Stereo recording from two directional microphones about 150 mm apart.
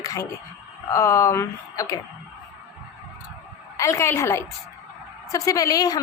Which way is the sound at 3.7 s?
20° left (ahead or behind).